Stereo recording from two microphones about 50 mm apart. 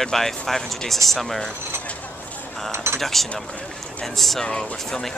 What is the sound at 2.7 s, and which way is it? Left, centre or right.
Cutlery, right.